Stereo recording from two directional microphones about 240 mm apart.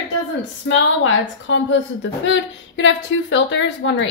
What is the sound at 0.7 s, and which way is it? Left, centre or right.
A woman's voice, left.